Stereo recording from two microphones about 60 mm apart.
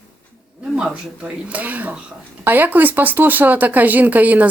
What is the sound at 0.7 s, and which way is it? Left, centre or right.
Speech, centre.